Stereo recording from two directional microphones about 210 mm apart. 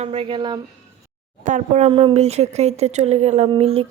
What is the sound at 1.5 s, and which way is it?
Speech, 35° right (ahead or behind).